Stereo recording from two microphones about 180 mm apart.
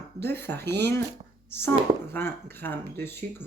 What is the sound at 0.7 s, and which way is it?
Speech, 65° right (ahead or behind).